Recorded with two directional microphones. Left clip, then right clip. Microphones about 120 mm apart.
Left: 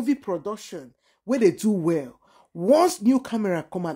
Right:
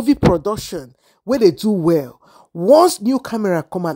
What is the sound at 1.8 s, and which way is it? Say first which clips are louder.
Speech: right 8 dB; 60° right (ahead or behind).